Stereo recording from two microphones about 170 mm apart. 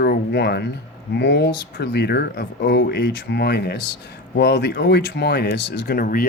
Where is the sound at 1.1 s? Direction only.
90° left.